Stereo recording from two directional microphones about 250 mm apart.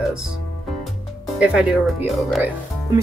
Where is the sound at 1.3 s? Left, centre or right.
Centre.